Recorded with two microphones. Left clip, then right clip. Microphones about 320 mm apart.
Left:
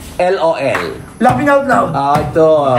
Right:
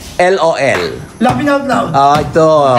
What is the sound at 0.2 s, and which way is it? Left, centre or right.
Speech, right.